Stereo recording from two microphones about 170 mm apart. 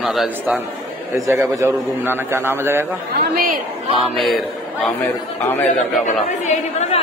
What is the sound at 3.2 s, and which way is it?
Speech, 55° right (ahead or behind).